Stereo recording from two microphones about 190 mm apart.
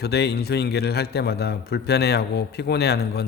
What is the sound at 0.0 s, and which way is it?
A man's voice, 60° left (ahead or behind).